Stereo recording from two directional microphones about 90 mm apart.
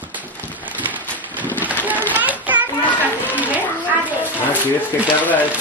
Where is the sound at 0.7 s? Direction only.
20° right (ahead or behind).